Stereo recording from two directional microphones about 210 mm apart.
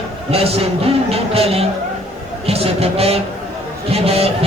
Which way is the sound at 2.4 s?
30° right (ahead or behind).